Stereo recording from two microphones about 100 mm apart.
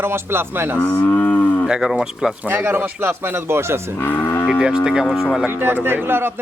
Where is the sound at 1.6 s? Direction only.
5° right (ahead or behind).